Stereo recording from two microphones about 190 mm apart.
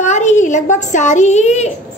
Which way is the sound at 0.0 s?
40° left (ahead or behind).